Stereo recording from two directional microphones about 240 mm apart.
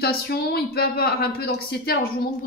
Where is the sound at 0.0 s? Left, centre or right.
Left.